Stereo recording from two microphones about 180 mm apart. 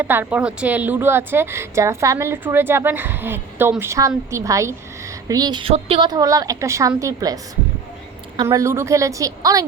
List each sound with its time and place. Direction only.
0.0 s a woman's voice: 10° right (ahead or behind); by 6.1 s 35° right (ahead or behind)
6.1 s a woman's voice: 20° right (ahead or behind)
8.4 s a woman's voice: 15° right (ahead or behind)